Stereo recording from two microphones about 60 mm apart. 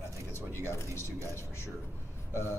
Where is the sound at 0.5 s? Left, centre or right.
Left.